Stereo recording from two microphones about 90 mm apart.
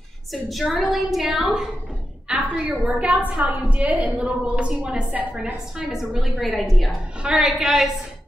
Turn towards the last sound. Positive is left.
turn(degrees=-5)  # may be behind; listen again after turning